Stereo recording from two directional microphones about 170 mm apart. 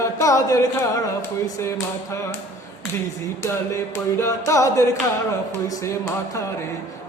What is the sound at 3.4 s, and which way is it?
Singing, 15° left (ahead or behind).